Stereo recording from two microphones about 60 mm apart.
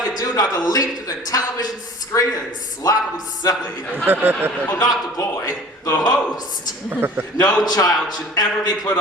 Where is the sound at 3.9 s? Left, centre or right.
Right.